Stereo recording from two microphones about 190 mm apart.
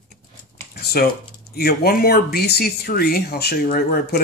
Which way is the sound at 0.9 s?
55° left (ahead or behind).